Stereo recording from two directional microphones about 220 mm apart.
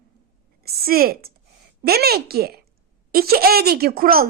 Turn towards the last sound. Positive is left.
turn(degrees=-40)  # may be behind; listen again after turning